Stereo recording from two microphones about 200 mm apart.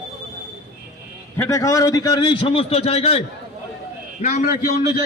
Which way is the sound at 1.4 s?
15° left (ahead or behind).